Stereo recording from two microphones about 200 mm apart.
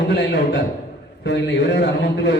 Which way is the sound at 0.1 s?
55° left (ahead or behind).